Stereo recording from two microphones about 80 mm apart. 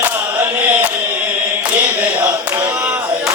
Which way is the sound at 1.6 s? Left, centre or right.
Right.